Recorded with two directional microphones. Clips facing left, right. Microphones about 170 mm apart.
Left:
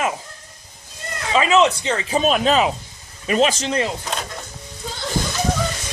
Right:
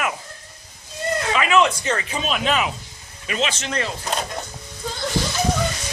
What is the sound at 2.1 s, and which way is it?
Speech, 40° left (ahead or behind).